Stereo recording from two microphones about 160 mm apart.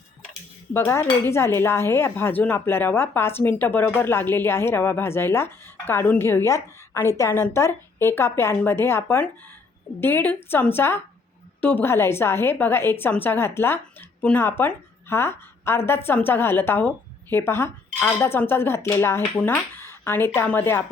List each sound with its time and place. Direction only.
0.7 s speech: 15° left (ahead or behind)